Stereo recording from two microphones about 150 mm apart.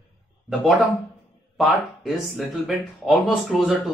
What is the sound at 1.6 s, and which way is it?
Speech, centre (ahead or behind).